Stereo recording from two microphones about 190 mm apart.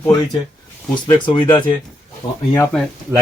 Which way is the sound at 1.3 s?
25° left (ahead or behind).